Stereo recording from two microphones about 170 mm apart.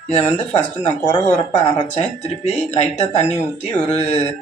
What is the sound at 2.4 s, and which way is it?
Speech, 45° left (ahead or behind).